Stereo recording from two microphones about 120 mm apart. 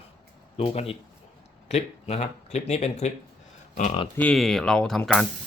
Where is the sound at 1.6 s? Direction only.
70° left (ahead or behind).